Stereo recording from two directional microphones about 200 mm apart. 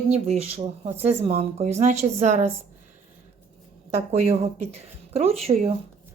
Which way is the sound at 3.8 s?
30° right (ahead or behind).